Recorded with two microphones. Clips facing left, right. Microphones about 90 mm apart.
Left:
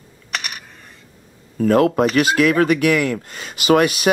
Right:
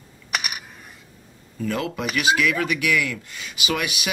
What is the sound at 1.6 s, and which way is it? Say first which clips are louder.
Speech: left 12 dB; 50° left (ahead or behind).